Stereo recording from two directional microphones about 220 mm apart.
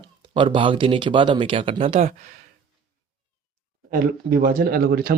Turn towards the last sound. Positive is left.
turn(degrees=-45)  # may be behind; listen again after turning